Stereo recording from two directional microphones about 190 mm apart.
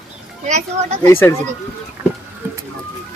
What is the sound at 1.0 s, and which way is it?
Speech, 10° left (ahead or behind).